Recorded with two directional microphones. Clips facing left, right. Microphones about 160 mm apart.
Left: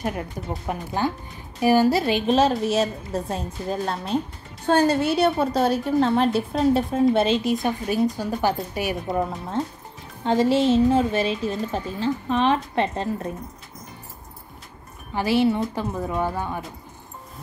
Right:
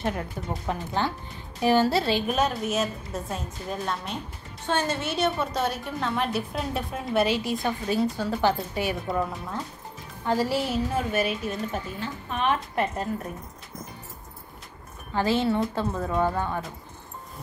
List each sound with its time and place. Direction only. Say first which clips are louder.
0.0 s speech: left 1 dB; 10° left (ahead or behind)
2.2 s a woman's voice: left 6 dB; 30° left (ahead or behind)
9.6 s a woman's voice: left 8 dB; 25° left (ahead or behind)
15.1 s speech: left 3 dB; 15° left (ahead or behind)